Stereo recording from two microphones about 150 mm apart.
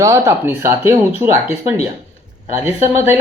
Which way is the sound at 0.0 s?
20° right (ahead or behind).